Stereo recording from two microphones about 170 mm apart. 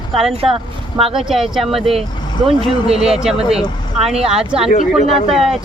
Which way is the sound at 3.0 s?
5° right (ahead or behind).